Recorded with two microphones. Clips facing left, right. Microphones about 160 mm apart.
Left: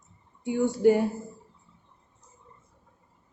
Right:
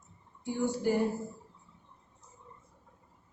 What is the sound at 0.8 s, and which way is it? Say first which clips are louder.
Speech: left 9 dB; 70° left (ahead or behind).